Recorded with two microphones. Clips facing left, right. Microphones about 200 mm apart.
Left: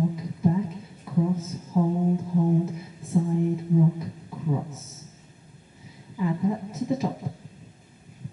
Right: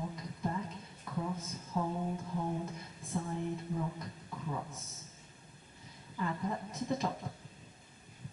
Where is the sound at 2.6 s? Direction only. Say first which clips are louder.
Left 10 dB; 5° left (ahead or behind).